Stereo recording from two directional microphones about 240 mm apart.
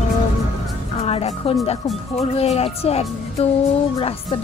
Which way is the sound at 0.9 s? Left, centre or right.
Left.